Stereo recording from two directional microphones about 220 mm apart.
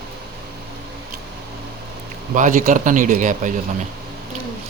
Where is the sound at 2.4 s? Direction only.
35° right (ahead or behind).